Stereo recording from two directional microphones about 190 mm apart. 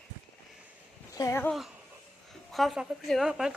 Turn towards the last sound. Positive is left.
turn(degrees=-5)  # may be behind; listen again after turning